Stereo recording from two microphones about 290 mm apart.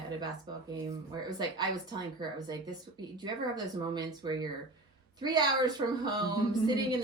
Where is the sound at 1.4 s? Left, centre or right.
Centre.